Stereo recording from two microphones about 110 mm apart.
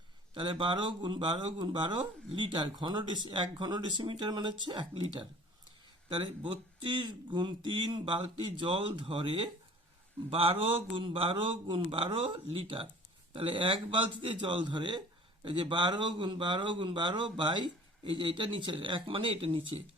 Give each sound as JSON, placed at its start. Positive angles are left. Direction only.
{"t": 0.3, "sound": "speech", "side_deg": -50}
{"t": 10.2, "sound": "a man's voice", "side_deg": -55}